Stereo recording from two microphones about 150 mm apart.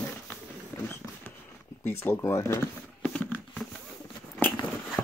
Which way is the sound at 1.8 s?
15° left (ahead or behind).